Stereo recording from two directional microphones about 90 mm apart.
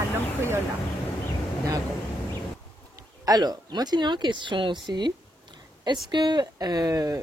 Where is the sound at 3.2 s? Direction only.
45° right (ahead or behind).